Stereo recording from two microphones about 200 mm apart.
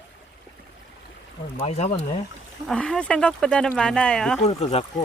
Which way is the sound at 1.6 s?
30° left (ahead or behind).